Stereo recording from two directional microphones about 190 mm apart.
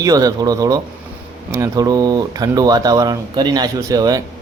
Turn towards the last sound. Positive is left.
turn(degrees=-20)  # may be behind; listen again after turning